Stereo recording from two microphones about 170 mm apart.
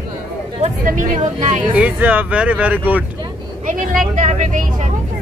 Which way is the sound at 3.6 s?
50° right (ahead or behind).